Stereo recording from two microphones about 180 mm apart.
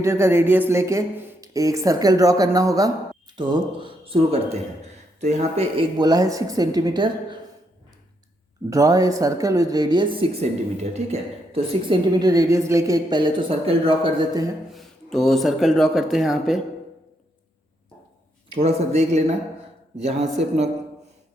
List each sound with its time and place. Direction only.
0.0 s a man's voice: 15° right (ahead or behind)
8.7 s a man's voice: 20° right (ahead or behind); by 11.9 s 35° right (ahead or behind)
12.1 s a man's voice: 20° right (ahead or behind)
14.7 s speech: centre (ahead or behind)
18.5 s a woman's voice: 35° right (ahead or behind)